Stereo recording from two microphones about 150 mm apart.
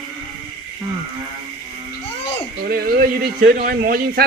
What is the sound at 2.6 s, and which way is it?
Speech, 90° right.